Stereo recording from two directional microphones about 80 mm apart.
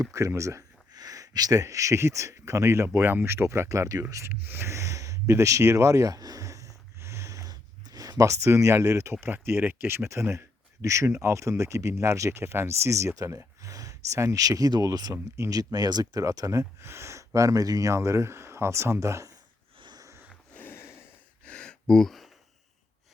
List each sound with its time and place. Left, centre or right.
0.0 s speech: right
4.3 s a sound: right
9.2 s speech: right
15.1 s speech: right
16.2 s speech: right
20.5 s a sound: left
21.4 s gasp: centre